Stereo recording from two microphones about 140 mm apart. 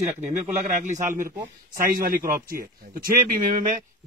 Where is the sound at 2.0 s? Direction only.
90° right.